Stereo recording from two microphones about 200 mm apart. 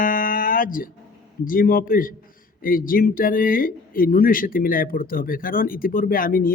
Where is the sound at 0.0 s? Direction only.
40° left (ahead or behind).